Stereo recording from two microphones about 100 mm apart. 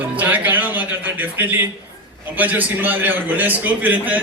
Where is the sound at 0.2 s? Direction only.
15° right (ahead or behind).